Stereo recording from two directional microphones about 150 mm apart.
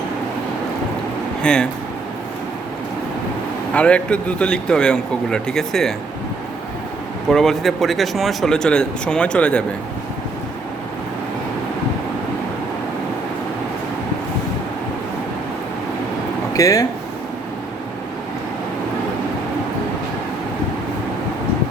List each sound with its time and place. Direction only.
1.4 s speech: 5° left (ahead or behind)
3.8 s speech: 10° left (ahead or behind)
7.3 s speech: centre (ahead or behind)
16.5 s speech: 20° left (ahead or behind)